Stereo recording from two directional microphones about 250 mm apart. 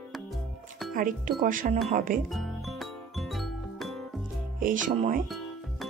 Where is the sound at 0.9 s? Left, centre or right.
Right.